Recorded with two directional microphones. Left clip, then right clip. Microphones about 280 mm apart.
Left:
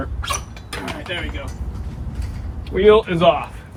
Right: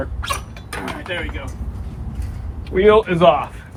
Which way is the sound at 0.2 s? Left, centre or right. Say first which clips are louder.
Even; centre.